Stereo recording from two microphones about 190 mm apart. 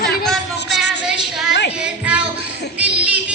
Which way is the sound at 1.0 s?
Centre (ahead or behind).